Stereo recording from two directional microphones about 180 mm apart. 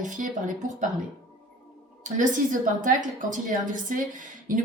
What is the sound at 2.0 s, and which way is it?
Speech, 45° right (ahead or behind).